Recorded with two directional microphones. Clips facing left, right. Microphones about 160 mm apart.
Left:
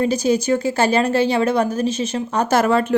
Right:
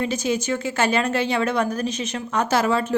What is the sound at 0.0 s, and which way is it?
Speech, 40° left (ahead or behind).